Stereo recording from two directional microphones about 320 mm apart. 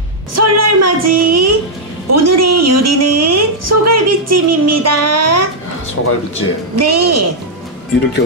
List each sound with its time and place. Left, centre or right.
0.3 s a sound: right
6.0 s speech: left
6.8 s a woman's voice: right